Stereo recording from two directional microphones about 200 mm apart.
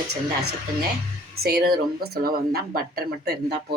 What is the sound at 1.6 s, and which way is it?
Speech, 50° right (ahead or behind).